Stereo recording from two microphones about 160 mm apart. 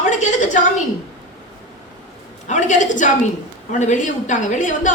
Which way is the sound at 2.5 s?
50° left (ahead or behind).